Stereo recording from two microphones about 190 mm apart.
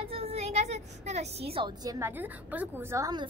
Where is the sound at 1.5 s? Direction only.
25° right (ahead or behind).